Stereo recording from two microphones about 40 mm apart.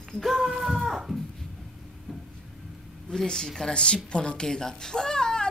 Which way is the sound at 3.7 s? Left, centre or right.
Left.